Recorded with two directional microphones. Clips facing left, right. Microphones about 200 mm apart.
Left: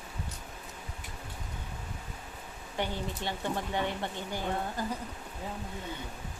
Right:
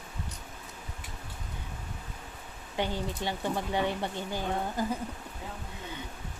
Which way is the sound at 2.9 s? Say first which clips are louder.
Right 2 dB; 15° right (ahead or behind).